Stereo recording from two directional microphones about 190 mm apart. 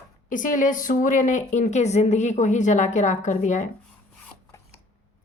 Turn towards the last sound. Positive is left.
turn(degrees=40)  # may be behind; listen again after turning